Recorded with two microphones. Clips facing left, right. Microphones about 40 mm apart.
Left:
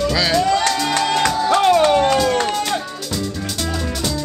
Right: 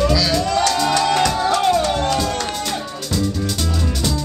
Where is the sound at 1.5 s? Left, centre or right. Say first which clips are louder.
Left 4 dB; centre.